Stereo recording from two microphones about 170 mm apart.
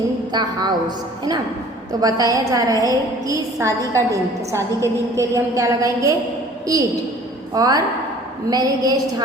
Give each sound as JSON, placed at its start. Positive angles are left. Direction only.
{"t": 0.3, "sound": "a woman's voice", "side_deg": -25}